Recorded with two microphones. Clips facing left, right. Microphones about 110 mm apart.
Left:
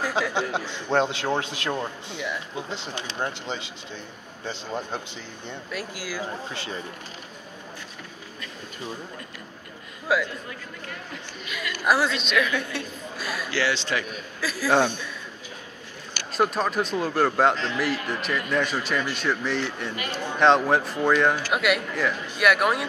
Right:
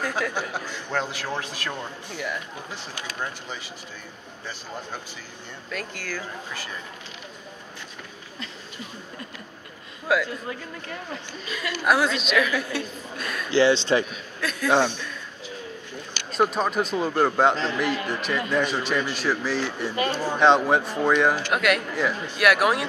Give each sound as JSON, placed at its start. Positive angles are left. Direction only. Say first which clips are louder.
{"t": 0.3, "sound": "a man's voice", "louder": "left 3 dB", "side_deg": 20}
{"t": 5.7, "sound": "speech", "louder": "right 1 dB", "side_deg": 10}
{"t": 6.5, "sound": "a man's voice", "louder": "left 2 dB", "side_deg": 25}
{"t": 10.1, "sound": "a woman's voice", "louder": "right 1 dB", "side_deg": 0}
{"t": 11.4, "sound": "speech", "louder": "right 2 dB", "side_deg": -30}
{"t": 11.8, "sound": "a woman's voice", "louder": "right 1 dB", "side_deg": 0}
{"t": 13.5, "sound": "speech", "louder": "right 8 dB", "side_deg": -25}
{"t": 14.4, "sound": "a woman's voice", "louder": "even", "side_deg": 0}
{"t": 16.3, "sound": "a woman's voice", "louder": "right 1 dB", "side_deg": 0}